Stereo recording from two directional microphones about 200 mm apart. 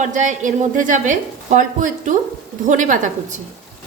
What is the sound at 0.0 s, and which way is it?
A woman's voice, 40° right (ahead or behind).